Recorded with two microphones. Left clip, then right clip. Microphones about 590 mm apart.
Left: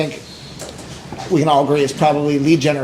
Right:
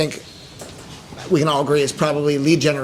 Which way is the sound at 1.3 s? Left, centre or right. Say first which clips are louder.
Left 3 dB; right.